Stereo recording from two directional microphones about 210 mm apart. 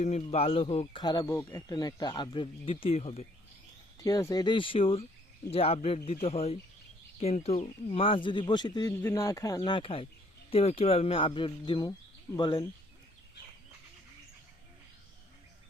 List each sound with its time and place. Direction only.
0.0 s speech: 30° left (ahead or behind)
4.0 s speech: 15° left (ahead or behind)